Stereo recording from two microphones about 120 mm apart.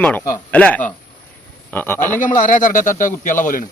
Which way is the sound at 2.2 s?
90° left.